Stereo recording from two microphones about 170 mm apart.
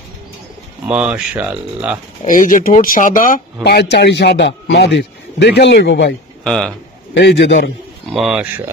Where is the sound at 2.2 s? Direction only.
50° left (ahead or behind).